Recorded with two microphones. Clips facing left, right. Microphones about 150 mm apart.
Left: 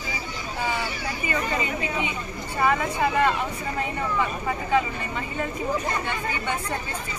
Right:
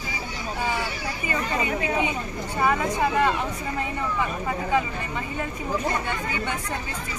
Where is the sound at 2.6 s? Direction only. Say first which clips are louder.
Even; 15° right (ahead or behind).